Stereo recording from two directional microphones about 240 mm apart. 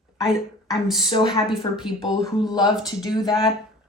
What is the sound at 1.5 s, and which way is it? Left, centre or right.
Speech, centre.